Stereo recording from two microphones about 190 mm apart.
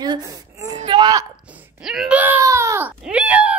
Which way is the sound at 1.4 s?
10° right (ahead or behind).